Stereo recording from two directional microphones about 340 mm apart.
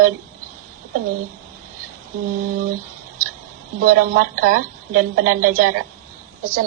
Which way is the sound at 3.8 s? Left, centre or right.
Right.